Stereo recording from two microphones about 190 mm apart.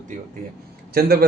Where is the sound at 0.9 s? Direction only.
55° right (ahead or behind).